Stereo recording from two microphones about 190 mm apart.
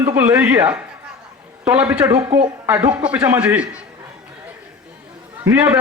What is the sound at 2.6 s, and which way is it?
A man's voice, 10° right (ahead or behind).